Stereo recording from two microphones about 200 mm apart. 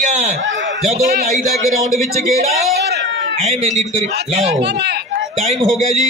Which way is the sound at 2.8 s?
55° right (ahead or behind).